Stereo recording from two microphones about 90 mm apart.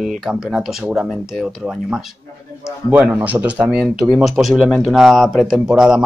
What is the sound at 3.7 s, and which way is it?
Speech, centre (ahead or behind).